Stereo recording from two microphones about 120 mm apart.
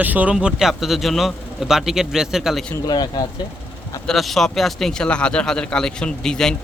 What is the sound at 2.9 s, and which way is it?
Speech, 35° left (ahead or behind).